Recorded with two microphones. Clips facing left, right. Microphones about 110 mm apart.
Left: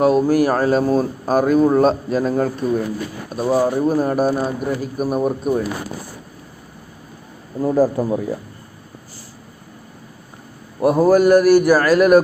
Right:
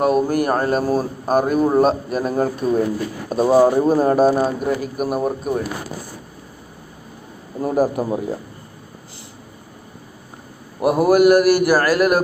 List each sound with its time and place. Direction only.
0.0 s a man's voice: 5° right (ahead or behind)
5.1 s speech: centre (ahead or behind)
7.6 s a man's voice: 15° right (ahead or behind)
10.8 s a man's voice: 15° right (ahead or behind)